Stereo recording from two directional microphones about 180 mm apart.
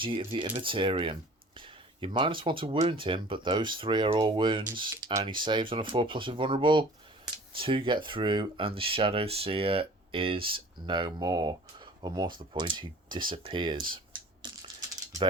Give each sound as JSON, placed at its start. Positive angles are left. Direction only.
{"t": 0.0, "sound": "speech", "side_deg": -30}
{"t": 14.4, "sound": "typing", "side_deg": -25}